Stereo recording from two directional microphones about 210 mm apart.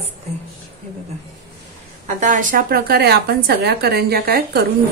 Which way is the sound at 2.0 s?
35° right (ahead or behind).